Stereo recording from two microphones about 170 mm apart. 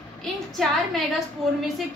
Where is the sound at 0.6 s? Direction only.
Centre (ahead or behind).